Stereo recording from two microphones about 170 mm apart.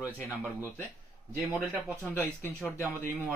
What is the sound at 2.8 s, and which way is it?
Speech, 10° right (ahead or behind).